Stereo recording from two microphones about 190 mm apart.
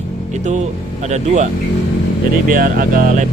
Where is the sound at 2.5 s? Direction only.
45° right (ahead or behind).